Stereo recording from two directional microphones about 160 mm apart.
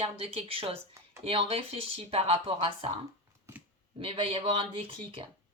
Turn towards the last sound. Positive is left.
turn(degrees=-35)  # may be behind; listen again after turning